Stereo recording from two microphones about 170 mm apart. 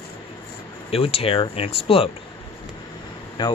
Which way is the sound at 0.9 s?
35° left (ahead or behind).